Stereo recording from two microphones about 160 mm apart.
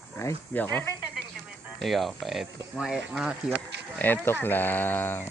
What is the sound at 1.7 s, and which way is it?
Speech, centre (ahead or behind).